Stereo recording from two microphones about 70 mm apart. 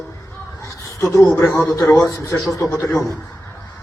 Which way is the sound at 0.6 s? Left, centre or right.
Left.